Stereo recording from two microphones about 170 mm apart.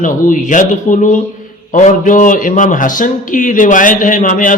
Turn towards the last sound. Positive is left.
turn(degrees=50)  # may be behind; listen again after turning